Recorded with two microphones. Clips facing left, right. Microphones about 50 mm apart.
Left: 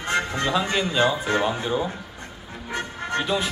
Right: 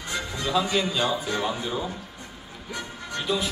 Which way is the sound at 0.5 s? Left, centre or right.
Left.